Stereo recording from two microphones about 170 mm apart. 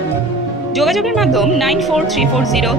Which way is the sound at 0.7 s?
Centre (ahead or behind).